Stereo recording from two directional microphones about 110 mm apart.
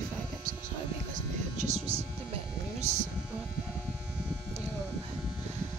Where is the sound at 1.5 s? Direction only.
90° right.